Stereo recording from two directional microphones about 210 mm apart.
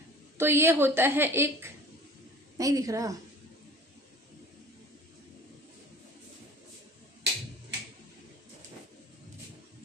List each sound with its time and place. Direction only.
0.3 s a woman's voice: 10° right (ahead or behind)